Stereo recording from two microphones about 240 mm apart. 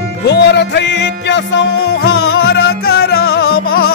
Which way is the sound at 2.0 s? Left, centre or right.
Left.